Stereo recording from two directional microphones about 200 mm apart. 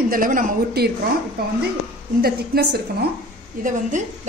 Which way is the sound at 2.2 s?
50° right (ahead or behind).